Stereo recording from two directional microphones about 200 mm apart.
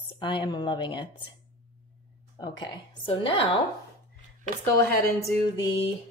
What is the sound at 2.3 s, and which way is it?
Speech, 20° left (ahead or behind).